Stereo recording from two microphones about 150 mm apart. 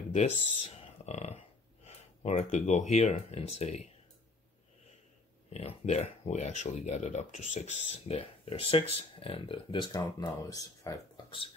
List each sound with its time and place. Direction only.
0.1 s a sound: 45° left (ahead or behind)
1.9 s speech: 45° left (ahead or behind)
5.5 s speech: 45° left (ahead or behind); by 11.0 s 25° left (ahead or behind)